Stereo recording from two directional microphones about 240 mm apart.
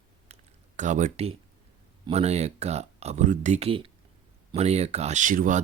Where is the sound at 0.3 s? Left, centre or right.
Right.